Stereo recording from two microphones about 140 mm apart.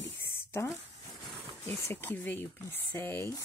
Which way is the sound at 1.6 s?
15° left (ahead or behind).